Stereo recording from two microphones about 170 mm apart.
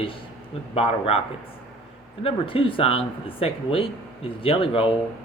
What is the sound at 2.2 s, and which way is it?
Speech, 30° left (ahead or behind).